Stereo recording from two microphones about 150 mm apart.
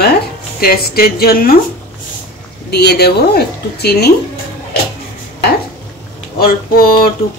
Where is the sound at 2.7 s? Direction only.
90° left.